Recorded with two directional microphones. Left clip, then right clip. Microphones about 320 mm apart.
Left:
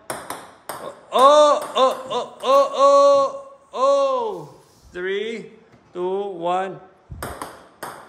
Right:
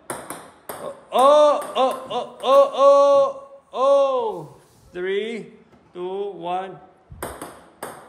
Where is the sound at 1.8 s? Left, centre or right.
Centre.